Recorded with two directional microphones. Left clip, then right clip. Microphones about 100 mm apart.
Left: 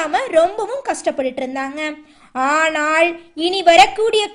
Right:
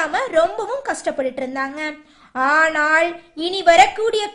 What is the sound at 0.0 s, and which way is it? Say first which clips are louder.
A woman's voice: left 2 dB; 30° left (ahead or behind).